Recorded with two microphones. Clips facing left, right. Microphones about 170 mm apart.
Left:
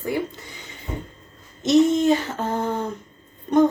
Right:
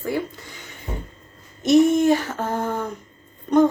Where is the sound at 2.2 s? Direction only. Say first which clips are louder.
Even; 20° left (ahead or behind).